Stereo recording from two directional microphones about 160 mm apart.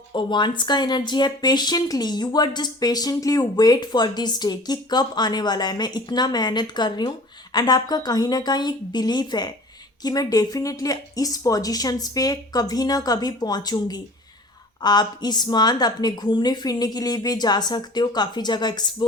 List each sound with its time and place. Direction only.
0.1 s speech: 30° left (ahead or behind)